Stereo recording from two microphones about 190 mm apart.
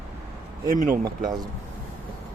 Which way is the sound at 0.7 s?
45° right (ahead or behind).